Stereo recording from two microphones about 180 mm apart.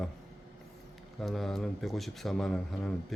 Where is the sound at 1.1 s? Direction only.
Centre (ahead or behind).